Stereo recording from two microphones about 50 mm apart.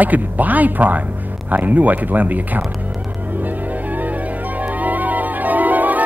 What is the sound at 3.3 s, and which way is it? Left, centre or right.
Music, right.